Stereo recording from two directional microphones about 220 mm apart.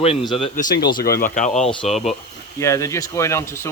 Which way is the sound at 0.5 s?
45° left (ahead or behind).